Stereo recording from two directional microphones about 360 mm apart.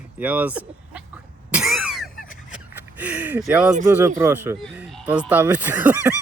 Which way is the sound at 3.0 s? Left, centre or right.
Centre.